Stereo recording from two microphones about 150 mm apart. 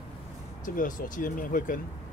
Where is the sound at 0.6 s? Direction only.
65° left (ahead or behind).